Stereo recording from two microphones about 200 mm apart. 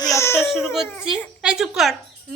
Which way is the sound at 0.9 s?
10° left (ahead or behind).